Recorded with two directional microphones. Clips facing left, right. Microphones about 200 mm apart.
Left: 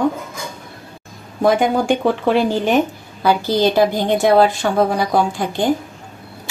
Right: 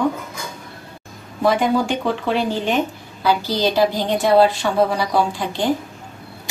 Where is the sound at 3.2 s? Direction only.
50° left (ahead or behind).